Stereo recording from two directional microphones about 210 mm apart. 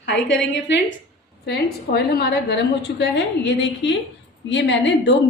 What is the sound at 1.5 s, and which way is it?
A woman's voice, 50° left (ahead or behind).